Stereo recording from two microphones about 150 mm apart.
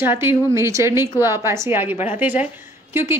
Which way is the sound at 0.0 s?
15° right (ahead or behind).